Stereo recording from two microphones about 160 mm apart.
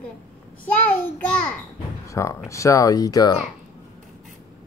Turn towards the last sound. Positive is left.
turn(degrees=20)  # may be behind; listen again after turning